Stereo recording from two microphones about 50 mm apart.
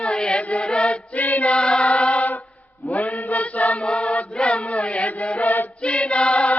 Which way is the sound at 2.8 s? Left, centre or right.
Left.